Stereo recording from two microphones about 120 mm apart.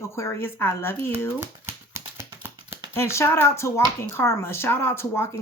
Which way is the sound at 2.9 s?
20° left (ahead or behind).